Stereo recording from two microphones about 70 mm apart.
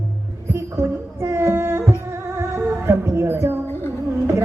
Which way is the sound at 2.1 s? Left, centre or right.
Right.